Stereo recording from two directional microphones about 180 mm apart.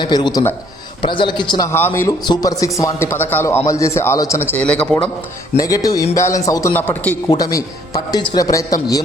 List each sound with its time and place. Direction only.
0.0 s a man's voice: 25° left (ahead or behind); by 5.0 s 5° left (ahead or behind)
5.5 s a man's voice: 20° left (ahead or behind)